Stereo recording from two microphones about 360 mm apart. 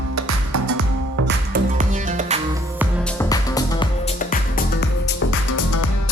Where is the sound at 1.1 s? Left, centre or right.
Right.